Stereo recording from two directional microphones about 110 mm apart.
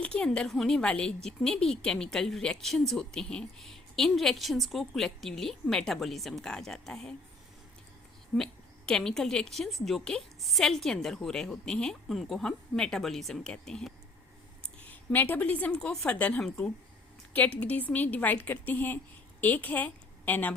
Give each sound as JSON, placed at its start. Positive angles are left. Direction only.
{"t": 0.0, "sound": "a woman's voice", "side_deg": 10}
{"t": 8.3, "sound": "a woman's voice", "side_deg": 0}